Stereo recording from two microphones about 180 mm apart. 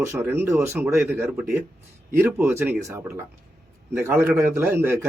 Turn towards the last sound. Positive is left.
turn(degrees=-10)  # may be behind; listen again after turning